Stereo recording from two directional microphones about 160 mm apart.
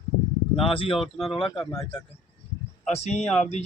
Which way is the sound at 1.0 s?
Centre (ahead or behind).